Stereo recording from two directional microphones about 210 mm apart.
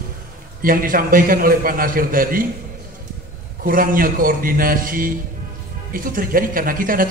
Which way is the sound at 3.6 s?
40° right (ahead or behind).